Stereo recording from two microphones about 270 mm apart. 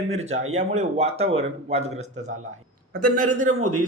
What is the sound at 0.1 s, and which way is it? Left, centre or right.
Speech, right.